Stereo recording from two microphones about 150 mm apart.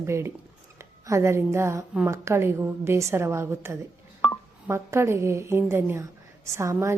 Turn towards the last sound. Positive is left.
turn(degrees=-20)  # may be behind; listen again after turning